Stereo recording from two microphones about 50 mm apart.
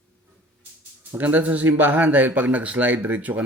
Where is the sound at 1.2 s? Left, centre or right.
Right.